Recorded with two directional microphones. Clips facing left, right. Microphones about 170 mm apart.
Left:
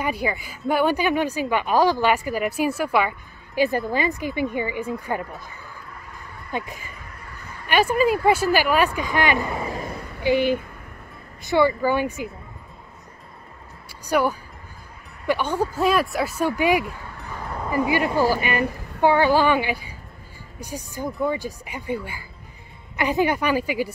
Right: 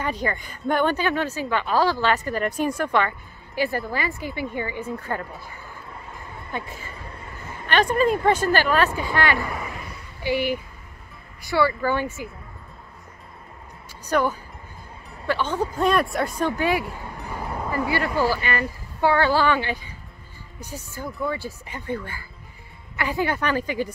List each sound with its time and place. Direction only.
0.0 s speech: 10° left (ahead or behind)
6.5 s speech: 15° left (ahead or behind)
7.2 s a sound: 20° right (ahead or behind)
7.6 s speech: 10° left (ahead or behind); by 9.8 s 30° left (ahead or behind)
10.2 s speech: 20° left (ahead or behind)
13.8 s music: 10° left (ahead or behind)
15.2 s speech: 10° left (ahead or behind)
16.8 s a sound: 15° right (ahead or behind)
17.6 s speech: 15° left (ahead or behind)